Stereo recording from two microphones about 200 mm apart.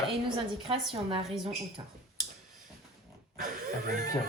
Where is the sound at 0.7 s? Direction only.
25° right (ahead or behind).